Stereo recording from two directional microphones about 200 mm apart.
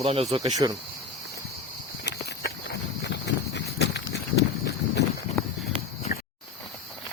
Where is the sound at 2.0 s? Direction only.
60° left (ahead or behind).